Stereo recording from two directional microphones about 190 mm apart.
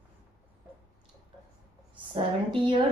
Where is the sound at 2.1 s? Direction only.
25° right (ahead or behind).